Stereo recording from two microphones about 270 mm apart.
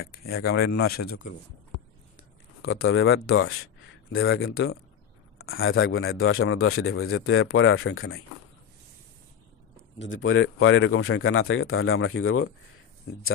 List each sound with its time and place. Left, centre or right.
0.7 s speech: left
2.6 s a man's voice: left
9.9 s a man's voice: left